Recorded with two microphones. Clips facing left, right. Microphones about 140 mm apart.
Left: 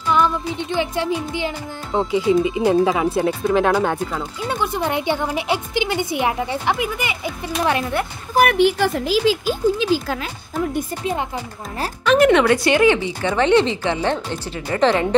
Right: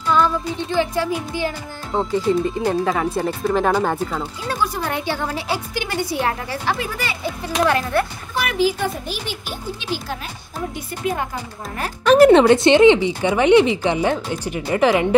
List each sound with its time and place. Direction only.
0.1 s music: 20° left (ahead or behind)
1.9 s a woman's voice: centre (ahead or behind)
4.5 s a woman's voice: 20° left (ahead or behind)
7.7 s music: 20° left (ahead or behind)
8.4 s speech: 60° left (ahead or behind); by 9.3 s 90° left
12.1 s speech: 35° right (ahead or behind); by 15.0 s 10° right (ahead or behind)